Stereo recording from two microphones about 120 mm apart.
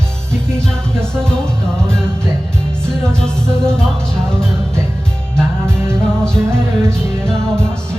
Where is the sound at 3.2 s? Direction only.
5° left (ahead or behind).